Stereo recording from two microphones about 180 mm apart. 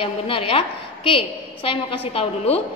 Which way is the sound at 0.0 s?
30° left (ahead or behind).